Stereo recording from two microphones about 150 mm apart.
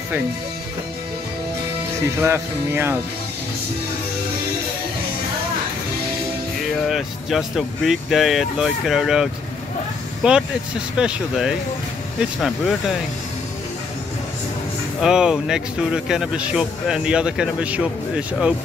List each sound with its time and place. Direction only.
2.2 s speech: 15° right (ahead or behind)
6.9 s speech: centre (ahead or behind)
15.0 s speech: 5° right (ahead or behind)